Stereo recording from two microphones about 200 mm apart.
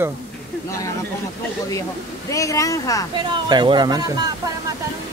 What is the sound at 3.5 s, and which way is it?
Speech, 25° right (ahead or behind).